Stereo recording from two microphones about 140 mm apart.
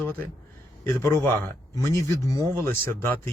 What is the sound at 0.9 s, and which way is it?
Speech, 20° left (ahead or behind).